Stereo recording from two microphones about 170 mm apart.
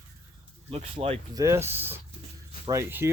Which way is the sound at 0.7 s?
35° right (ahead or behind).